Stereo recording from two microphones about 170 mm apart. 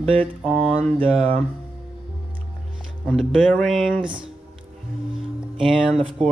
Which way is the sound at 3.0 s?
Centre (ahead or behind).